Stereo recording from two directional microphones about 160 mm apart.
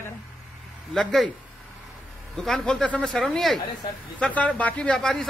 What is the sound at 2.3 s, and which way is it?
A man's voice, centre (ahead or behind).